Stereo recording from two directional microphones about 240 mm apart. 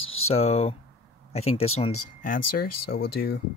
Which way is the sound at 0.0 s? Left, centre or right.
Left.